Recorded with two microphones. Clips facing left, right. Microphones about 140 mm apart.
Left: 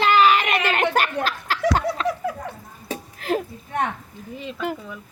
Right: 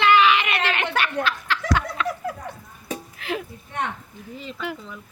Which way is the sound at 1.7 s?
35° left (ahead or behind).